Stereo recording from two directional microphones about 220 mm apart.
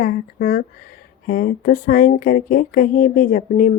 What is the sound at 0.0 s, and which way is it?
Speech, 40° left (ahead or behind).